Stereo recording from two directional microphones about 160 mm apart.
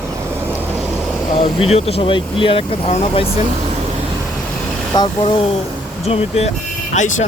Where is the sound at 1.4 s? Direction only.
40° left (ahead or behind).